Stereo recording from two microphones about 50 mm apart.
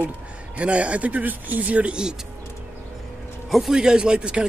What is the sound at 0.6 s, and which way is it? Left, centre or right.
Speech, right.